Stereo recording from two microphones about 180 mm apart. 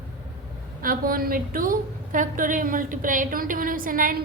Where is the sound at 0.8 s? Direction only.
55° right (ahead or behind).